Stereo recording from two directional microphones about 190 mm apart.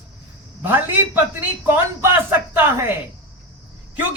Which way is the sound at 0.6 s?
10° right (ahead or behind).